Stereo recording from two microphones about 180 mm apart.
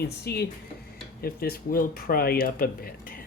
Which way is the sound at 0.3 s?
65° left (ahead or behind).